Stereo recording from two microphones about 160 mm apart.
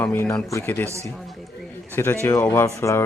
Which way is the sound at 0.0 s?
10° left (ahead or behind).